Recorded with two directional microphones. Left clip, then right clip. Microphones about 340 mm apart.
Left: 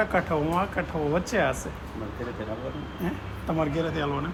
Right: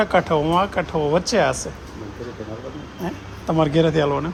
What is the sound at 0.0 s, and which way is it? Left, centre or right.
Speech, right.